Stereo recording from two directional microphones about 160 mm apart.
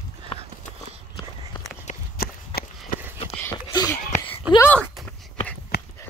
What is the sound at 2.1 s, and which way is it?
Run, 75° left (ahead or behind).